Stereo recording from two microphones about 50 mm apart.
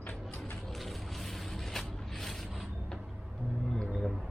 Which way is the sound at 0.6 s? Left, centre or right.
Centre.